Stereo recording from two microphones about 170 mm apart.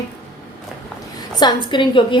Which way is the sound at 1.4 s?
25° left (ahead or behind).